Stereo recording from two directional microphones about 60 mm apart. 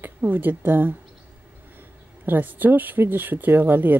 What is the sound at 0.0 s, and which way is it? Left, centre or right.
Speech, right.